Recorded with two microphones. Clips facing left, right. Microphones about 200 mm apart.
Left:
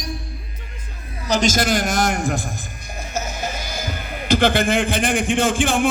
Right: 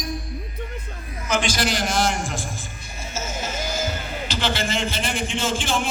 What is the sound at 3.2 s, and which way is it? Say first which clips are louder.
Music: left 2 dB; 60° left (ahead or behind).